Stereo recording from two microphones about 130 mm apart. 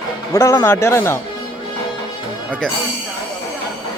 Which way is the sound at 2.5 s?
5° left (ahead or behind).